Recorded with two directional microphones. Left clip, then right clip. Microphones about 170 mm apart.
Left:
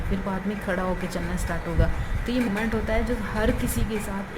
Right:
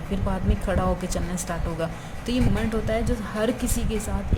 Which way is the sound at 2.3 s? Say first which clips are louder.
Even; 20° right (ahead or behind).